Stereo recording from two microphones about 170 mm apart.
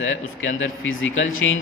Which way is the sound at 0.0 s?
90° left.